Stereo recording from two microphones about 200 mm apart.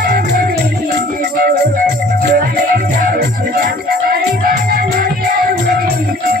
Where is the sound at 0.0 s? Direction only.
45° right (ahead or behind).